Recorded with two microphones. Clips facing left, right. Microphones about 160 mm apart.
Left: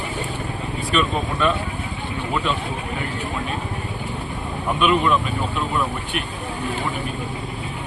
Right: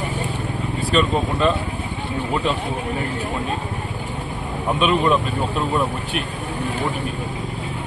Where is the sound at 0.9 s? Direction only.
35° right (ahead or behind).